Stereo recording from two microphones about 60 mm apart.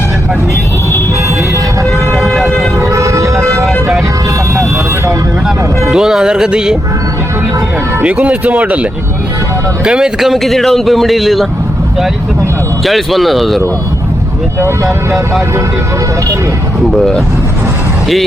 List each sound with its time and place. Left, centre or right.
2.1 s siren: centre
2.8 s vehicle: right
3.7 s vehicle: centre
5.9 s speech: centre
8.0 s speech: right
9.8 s speech: centre
12.8 s speech: centre
14.8 s speech: centre
16.9 s speech: centre